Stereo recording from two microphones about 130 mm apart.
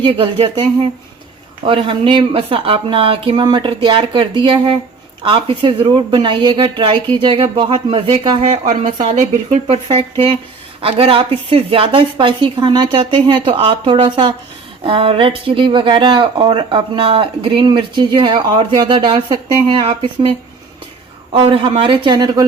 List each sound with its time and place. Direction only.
0.0 s speech: 40° right (ahead or behind)
8.4 s speech: 75° right (ahead or behind)
9.0 s speech: 55° right (ahead or behind); by 20.3 s 40° right (ahead or behind)
21.3 s speech: 45° right (ahead or behind)